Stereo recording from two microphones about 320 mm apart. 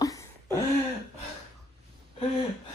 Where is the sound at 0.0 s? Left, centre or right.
Centre.